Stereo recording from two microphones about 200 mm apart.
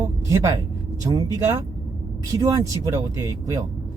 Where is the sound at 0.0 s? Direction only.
15° right (ahead or behind).